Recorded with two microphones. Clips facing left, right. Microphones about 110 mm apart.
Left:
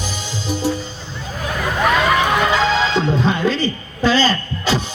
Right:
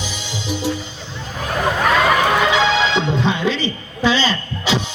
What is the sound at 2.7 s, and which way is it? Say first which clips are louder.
Music: even; 40° left (ahead or behind).